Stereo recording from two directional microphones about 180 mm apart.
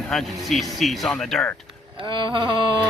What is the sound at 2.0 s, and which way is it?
Speech, 25° right (ahead or behind).